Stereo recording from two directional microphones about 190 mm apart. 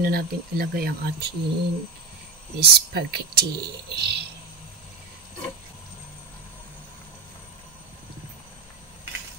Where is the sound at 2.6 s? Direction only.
55° right (ahead or behind).